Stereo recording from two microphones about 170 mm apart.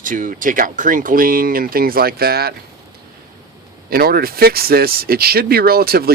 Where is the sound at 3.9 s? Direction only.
60° right (ahead or behind).